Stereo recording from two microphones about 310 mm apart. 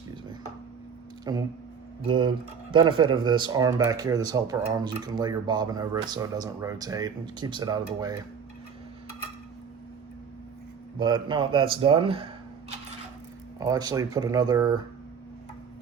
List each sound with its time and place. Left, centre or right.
1.2 s speech: centre
10.9 s speech: centre
13.6 s speech: centre